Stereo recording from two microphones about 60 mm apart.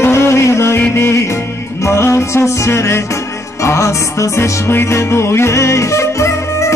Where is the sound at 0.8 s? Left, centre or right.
Left.